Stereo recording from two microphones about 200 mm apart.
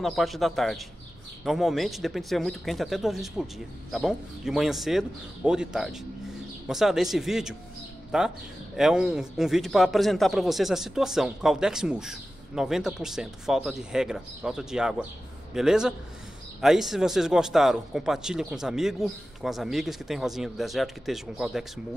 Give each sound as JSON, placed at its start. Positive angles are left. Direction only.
{"t": 0.0, "sound": "speech", "side_deg": 0}